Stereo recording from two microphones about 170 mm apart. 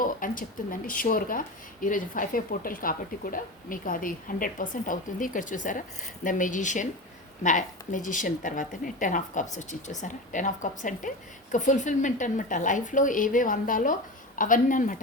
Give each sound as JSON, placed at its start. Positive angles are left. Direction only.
{"t": 0.0, "sound": "speech", "side_deg": 55}